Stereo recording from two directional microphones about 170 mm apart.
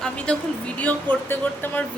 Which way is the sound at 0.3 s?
5° left (ahead or behind).